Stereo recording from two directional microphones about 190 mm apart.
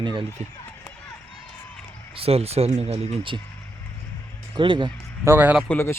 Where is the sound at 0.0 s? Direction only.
25° right (ahead or behind).